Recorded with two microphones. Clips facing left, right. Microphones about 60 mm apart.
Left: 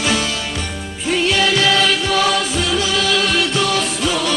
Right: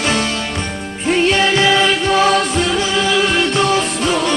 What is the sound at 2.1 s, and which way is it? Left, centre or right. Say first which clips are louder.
Music: right 4 dB; right.